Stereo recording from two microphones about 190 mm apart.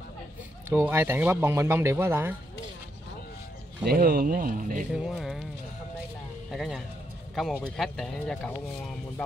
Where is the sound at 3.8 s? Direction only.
50° right (ahead or behind).